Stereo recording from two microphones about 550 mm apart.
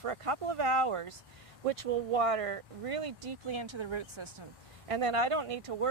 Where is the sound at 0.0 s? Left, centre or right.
Right.